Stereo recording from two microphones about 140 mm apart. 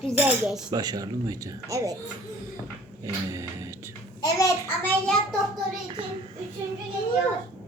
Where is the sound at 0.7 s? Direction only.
30° right (ahead or behind).